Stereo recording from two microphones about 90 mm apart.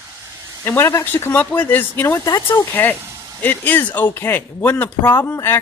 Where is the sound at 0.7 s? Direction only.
30° left (ahead or behind).